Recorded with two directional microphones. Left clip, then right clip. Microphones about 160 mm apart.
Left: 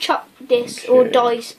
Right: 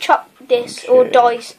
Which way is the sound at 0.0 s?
10° left (ahead or behind).